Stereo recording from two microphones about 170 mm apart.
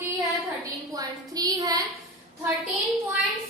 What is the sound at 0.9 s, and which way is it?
Speech, 20° right (ahead or behind).